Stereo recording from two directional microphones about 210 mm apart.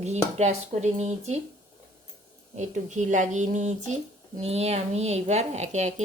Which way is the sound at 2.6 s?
35° right (ahead or behind).